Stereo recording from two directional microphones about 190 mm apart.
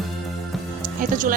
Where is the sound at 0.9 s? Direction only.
45° right (ahead or behind).